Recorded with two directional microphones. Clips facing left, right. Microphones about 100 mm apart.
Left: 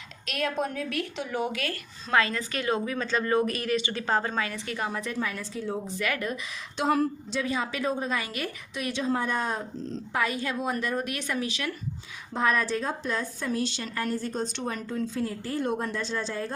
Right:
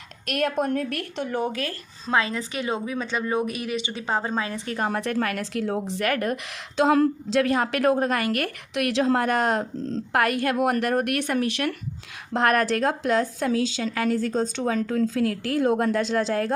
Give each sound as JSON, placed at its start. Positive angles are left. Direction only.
{"t": 0.3, "sound": "a woman's voice", "side_deg": -55}
{"t": 1.5, "sound": "speech", "side_deg": -35}
{"t": 2.1, "sound": "a woman's voice", "side_deg": -20}
{"t": 4.3, "sound": "a woman's voice", "side_deg": -25}
{"t": 4.5, "sound": "speech", "side_deg": -40}
{"t": 4.9, "sound": "a woman's voice", "side_deg": -65}
{"t": 6.1, "sound": "a woman's voice", "side_deg": -50}
{"t": 7.3, "sound": "a woman's voice", "side_deg": -65}
{"t": 10.1, "sound": "a woman's voice", "side_deg": -70}
{"t": 12.3, "sound": "a woman's voice", "side_deg": -75}